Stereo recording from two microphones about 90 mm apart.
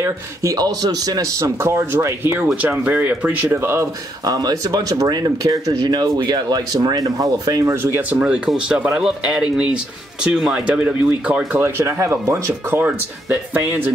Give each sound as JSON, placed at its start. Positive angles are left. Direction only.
{"t": 0.0, "sound": "speech", "side_deg": -35}
{"t": 2.4, "sound": "speech", "side_deg": -15}
{"t": 4.2, "sound": "speech", "side_deg": -45}
{"t": 7.7, "sound": "speech", "side_deg": -25}
{"t": 8.2, "sound": "speech", "side_deg": -10}
{"t": 11.5, "sound": "speech", "side_deg": -30}